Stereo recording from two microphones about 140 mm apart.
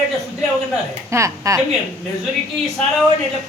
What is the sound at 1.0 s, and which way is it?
Speech, 20° right (ahead or behind).